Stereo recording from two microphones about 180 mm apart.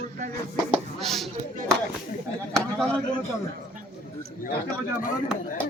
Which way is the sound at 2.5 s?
5° left (ahead or behind).